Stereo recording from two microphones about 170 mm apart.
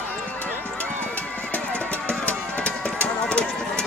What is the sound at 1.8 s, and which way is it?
Music, 10° left (ahead or behind).